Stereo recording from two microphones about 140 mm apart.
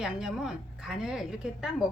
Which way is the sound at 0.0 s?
5° right (ahead or behind).